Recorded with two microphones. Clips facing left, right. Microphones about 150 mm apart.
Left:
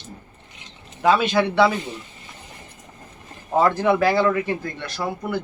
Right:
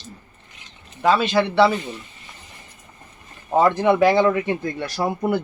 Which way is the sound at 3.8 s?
15° right (ahead or behind).